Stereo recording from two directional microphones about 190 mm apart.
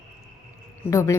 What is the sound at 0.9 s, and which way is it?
Speech, 15° left (ahead or behind).